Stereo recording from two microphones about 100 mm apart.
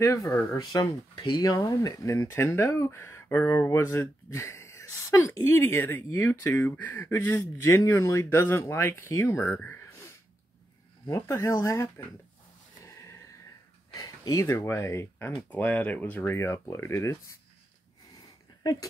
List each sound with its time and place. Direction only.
0.0 s speech: 30° left (ahead or behind)
1.1 s speech: 45° left (ahead or behind); by 9.5 s 30° left (ahead or behind)
9.5 s speech: 15° left (ahead or behind)
11.1 s speech: 35° left (ahead or behind)
13.9 s a sound: 40° left (ahead or behind)
14.4 s speech: 30° left (ahead or behind)
15.5 s speech: 15° left (ahead or behind)
18.6 s speech: 40° left (ahead or behind)